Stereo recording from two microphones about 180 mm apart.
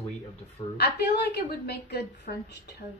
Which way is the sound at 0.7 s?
65° left (ahead or behind).